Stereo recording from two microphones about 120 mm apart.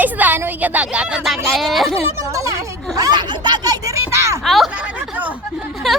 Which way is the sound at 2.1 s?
25° right (ahead or behind).